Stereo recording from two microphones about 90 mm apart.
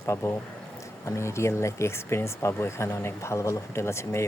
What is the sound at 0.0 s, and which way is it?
Speech, 30° left (ahead or behind).